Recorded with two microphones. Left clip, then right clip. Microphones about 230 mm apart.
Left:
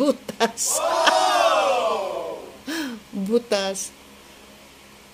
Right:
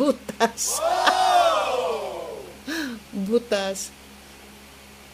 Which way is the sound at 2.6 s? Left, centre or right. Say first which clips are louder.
Even; centre.